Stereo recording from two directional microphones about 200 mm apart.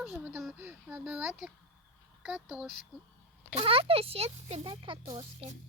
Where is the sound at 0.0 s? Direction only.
5° right (ahead or behind).